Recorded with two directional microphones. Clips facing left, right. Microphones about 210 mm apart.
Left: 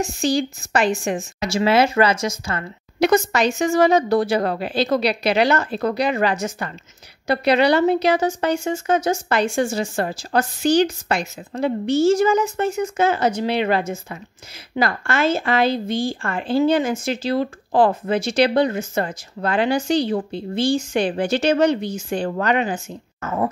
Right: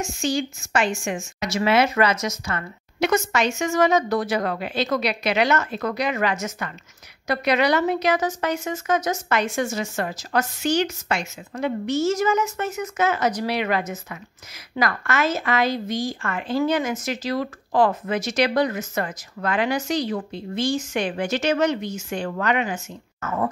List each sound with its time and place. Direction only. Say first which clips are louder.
0.0 s speech: left 4 dB; 35° left (ahead or behind)